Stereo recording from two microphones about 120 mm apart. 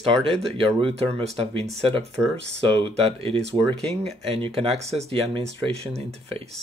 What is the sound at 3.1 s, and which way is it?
Speech, 55° right (ahead or behind).